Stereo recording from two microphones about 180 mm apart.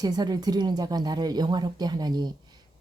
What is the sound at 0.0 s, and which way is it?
Speech, 20° right (ahead or behind).